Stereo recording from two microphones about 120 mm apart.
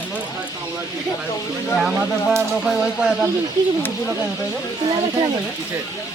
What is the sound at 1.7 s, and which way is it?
A man's voice, centre (ahead or behind).